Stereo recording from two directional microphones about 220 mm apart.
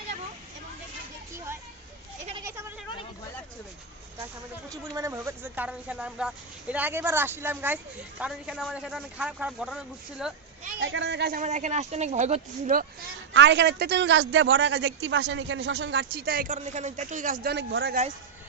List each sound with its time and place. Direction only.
2.4 s a sound: 10° right (ahead or behind)
4.7 s a man's voice: 15° right (ahead or behind)
10.8 s a man's voice: 55° right (ahead or behind)
11.3 s speech: 35° right (ahead or behind)
13.3 s a man's voice: 55° right (ahead or behind)
16.1 s speech: 45° right (ahead or behind)